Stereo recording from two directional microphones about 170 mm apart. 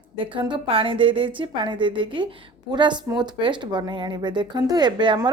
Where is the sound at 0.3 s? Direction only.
30° right (ahead or behind).